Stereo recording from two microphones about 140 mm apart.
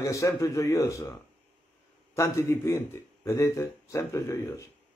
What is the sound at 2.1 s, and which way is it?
Speech, 20° left (ahead or behind).